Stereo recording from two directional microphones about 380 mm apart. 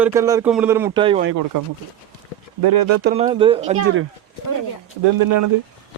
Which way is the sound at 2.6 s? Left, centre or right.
Right.